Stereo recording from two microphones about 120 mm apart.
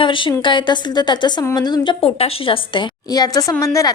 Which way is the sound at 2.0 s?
50° left (ahead or behind).